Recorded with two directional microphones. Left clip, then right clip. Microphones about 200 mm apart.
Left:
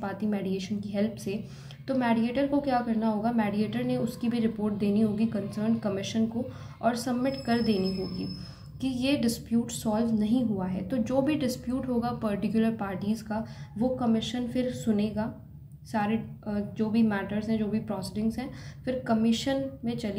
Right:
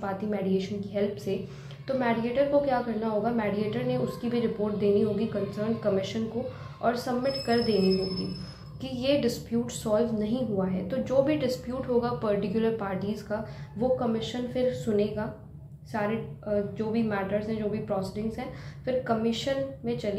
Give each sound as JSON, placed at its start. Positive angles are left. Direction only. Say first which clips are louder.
{"t": 0.0, "sound": "a woman's voice", "louder": "right 2 dB", "side_deg": 50}
{"t": 8.8, "sound": "a woman's voice", "louder": "right 2 dB", "side_deg": 45}